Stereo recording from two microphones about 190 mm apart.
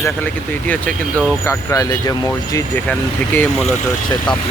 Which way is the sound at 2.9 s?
10° left (ahead or behind).